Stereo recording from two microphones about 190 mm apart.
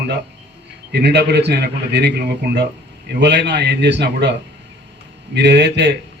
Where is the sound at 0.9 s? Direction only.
60° right (ahead or behind).